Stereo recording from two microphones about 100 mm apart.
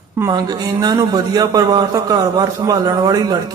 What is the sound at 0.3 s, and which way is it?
A man's voice, 40° right (ahead or behind).